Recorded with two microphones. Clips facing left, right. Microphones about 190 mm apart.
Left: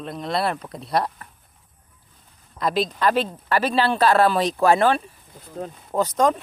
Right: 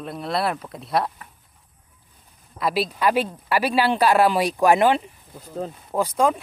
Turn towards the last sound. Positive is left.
turn(degrees=-10)  # may be behind; listen again after turning